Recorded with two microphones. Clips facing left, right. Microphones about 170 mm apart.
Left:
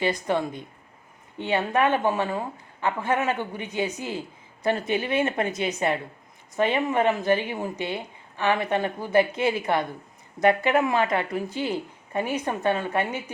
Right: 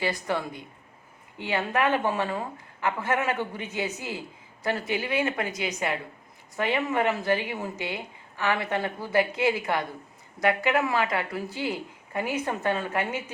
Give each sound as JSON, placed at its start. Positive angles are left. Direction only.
{"t": 0.0, "sound": "a woman's voice", "side_deg": 20}